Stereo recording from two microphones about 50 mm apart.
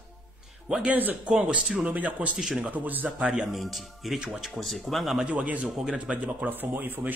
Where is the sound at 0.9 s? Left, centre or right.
Right.